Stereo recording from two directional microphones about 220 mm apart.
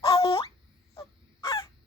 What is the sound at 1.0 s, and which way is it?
Honk, 25° left (ahead or behind).